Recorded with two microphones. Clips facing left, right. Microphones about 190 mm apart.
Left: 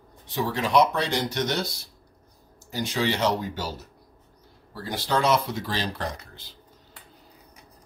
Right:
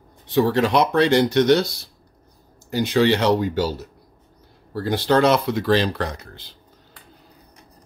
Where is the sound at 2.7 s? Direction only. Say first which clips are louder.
Right 8 dB; 65° right (ahead or behind).